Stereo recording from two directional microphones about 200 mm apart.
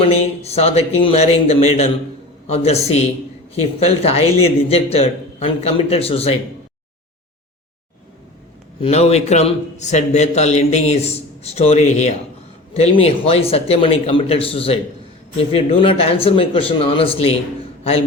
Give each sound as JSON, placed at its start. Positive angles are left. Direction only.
{"t": 0.4, "sound": "a man's voice", "side_deg": 30}
{"t": 8.8, "sound": "a man's voice", "side_deg": 30}